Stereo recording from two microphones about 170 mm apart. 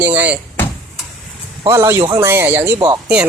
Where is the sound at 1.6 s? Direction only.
15° right (ahead or behind).